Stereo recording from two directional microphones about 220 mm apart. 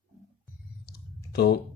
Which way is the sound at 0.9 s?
45° left (ahead or behind).